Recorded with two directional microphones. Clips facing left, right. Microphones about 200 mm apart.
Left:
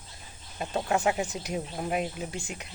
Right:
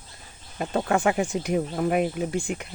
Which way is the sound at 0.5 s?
55° right (ahead or behind).